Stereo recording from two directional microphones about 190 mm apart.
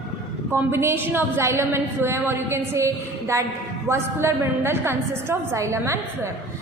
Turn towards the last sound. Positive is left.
turn(degrees=-15)  # may be behind; listen again after turning